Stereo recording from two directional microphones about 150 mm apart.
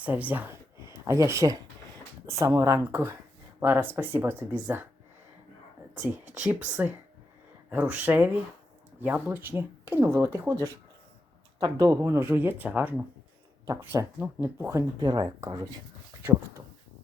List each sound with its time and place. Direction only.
0.0 s speech: 10° right (ahead or behind)
6.3 s speech: 10° right (ahead or behind)